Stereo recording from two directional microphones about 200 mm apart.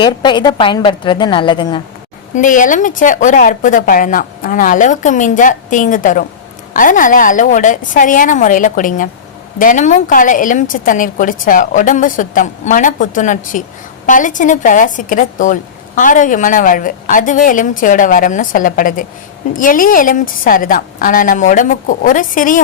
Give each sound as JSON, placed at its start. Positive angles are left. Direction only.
{"t": 0.0, "sound": "a woman's voice", "side_deg": 25}
{"t": 2.3, "sound": "a woman's voice", "side_deg": 40}